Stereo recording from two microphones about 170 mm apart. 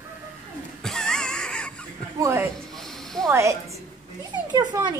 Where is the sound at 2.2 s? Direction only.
15° right (ahead or behind).